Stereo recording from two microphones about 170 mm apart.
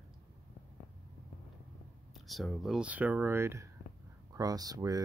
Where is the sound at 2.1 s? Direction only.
Centre (ahead or behind).